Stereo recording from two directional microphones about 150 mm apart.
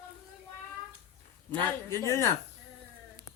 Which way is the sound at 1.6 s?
20° left (ahead or behind).